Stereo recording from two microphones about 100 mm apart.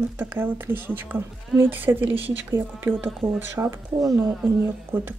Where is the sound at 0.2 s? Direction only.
20° right (ahead or behind).